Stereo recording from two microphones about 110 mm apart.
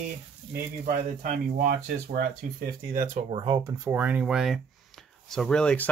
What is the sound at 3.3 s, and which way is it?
Speech, 55° right (ahead or behind).